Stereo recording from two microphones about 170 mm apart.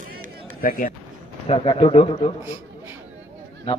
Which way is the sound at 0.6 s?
55° left (ahead or behind).